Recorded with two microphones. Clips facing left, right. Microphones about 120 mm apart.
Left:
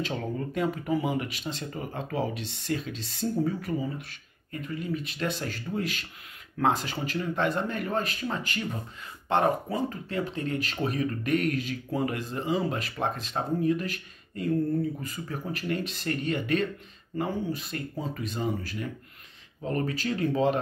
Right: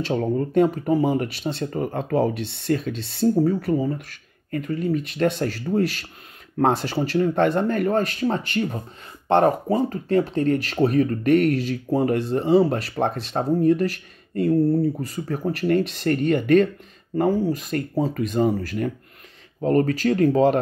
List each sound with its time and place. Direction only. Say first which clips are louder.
0.0 s speech: right 9 dB; 35° right (ahead or behind)